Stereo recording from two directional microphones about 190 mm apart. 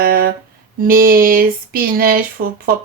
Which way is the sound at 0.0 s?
50° right (ahead or behind).